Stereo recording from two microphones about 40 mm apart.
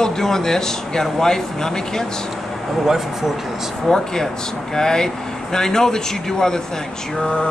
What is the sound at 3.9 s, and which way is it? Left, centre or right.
Speech, centre.